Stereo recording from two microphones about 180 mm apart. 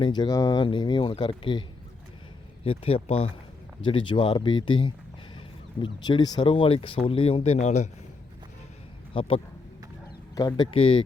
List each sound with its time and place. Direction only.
0.0 s speech: 25° left (ahead or behind)
2.6 s speech: 30° left (ahead or behind)
9.1 s speech: 30° left (ahead or behind)